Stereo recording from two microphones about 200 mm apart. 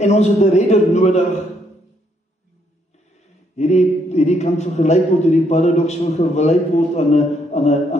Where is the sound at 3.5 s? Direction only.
35° left (ahead or behind).